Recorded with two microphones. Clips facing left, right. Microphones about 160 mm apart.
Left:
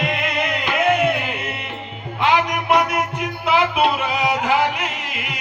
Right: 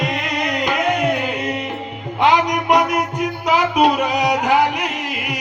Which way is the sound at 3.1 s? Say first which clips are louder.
Right 2 dB; 40° right (ahead or behind).